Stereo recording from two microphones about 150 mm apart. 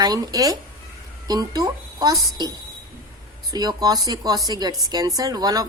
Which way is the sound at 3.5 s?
25° right (ahead or behind).